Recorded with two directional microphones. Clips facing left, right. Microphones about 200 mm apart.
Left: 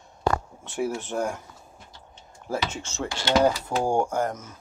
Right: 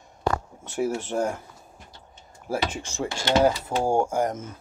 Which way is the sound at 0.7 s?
5° right (ahead or behind).